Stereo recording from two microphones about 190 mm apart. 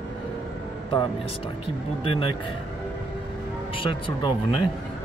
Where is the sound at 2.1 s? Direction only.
30° left (ahead or behind).